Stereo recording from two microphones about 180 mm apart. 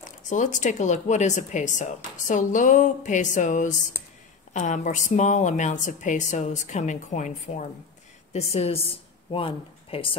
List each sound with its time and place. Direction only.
0.0 s a woman's voice: 45° left (ahead or behind)